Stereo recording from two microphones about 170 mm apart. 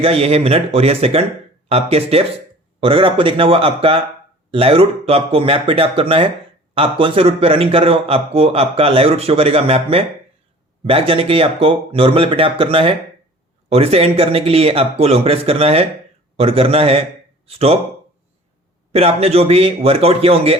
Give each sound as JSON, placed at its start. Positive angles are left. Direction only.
{"t": 0.0, "sound": "a man's voice", "side_deg": -35}
{"t": 18.9, "sound": "a man's voice", "side_deg": -35}